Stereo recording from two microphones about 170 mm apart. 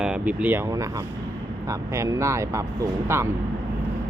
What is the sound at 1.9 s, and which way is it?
Speech, 15° right (ahead or behind).